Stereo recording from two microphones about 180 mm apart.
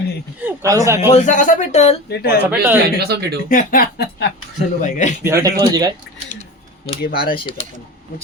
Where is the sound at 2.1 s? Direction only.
60° left (ahead or behind).